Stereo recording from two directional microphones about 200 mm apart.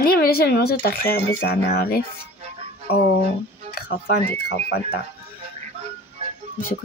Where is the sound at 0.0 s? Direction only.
50° left (ahead or behind).